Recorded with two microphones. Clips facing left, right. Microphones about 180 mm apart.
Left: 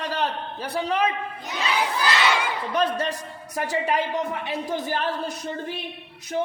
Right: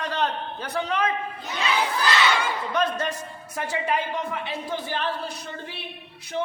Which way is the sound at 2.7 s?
35° left (ahead or behind).